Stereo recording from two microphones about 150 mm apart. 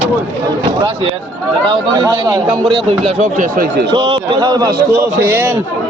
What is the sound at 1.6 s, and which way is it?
Speech, 30° right (ahead or behind).